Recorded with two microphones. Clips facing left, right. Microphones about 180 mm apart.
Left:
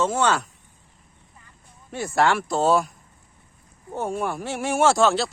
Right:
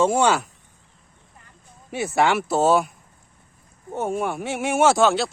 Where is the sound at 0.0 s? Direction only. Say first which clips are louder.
Right 3 dB; 10° right (ahead or behind).